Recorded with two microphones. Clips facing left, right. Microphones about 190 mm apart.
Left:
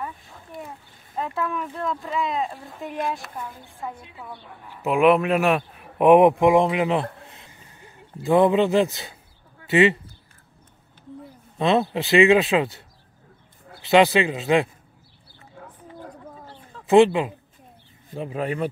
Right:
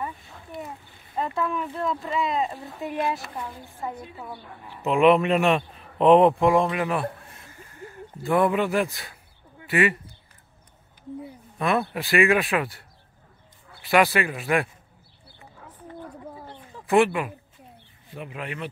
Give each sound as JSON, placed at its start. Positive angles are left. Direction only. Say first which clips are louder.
{"t": 0.0, "sound": "speech", "louder": "right 1 dB", "side_deg": -5}
{"t": 3.9, "sound": "a woman's voice", "louder": "right 3 dB", "side_deg": -40}
{"t": 4.6, "sound": "speech", "louder": "even", "side_deg": 5}
{"t": 11.5, "sound": "speech", "louder": "left 4 dB", "side_deg": 25}
{"t": 13.8, "sound": "speech", "louder": "left 4 dB", "side_deg": 20}
{"t": 16.3, "sound": "a sound", "louder": "right 2 dB", "side_deg": -15}
{"t": 16.8, "sound": "speech", "louder": "left 5 dB", "side_deg": 25}